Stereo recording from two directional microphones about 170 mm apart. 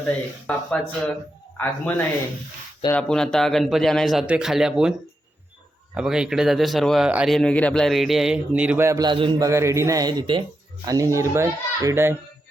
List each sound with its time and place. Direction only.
0.4 s a man's voice: 5° left (ahead or behind); by 9.5 s 30° right (ahead or behind)
9.5 s speech: 15° right (ahead or behind)